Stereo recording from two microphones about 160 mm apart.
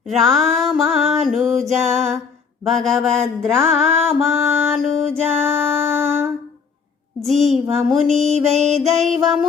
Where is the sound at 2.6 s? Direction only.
Centre (ahead or behind).